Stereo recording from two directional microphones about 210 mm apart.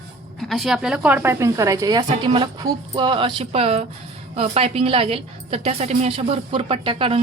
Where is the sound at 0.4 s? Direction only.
Centre (ahead or behind).